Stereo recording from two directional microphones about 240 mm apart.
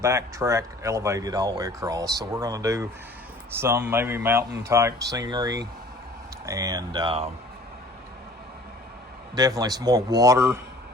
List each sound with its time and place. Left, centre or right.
0.0 s speech: centre
9.3 s speech: centre